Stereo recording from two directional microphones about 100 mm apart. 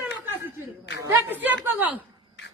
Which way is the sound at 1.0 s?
20° right (ahead or behind).